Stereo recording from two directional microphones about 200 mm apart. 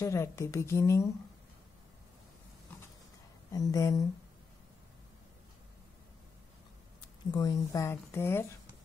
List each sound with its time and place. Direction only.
0.0 s speech: 15° left (ahead or behind)
3.5 s speech: 15° left (ahead or behind)
7.2 s speech: 20° left (ahead or behind)